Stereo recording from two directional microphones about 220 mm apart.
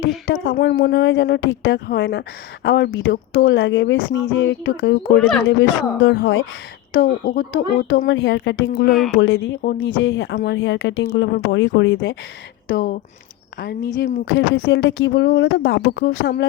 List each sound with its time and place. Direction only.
0.3 s speech: 50° left (ahead or behind)
6.9 s speech: 40° left (ahead or behind)
7.9 s speech: 60° left (ahead or behind)
9.6 s speech: 45° left (ahead or behind)
10.0 s speech: 55° left (ahead or behind)
12.7 s speech: 40° left (ahead or behind)
14.3 s speech: 60° left (ahead or behind); by 16.5 s 45° left (ahead or behind)